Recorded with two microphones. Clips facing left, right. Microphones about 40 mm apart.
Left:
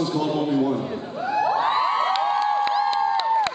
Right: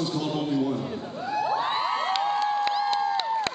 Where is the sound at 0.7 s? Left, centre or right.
Centre.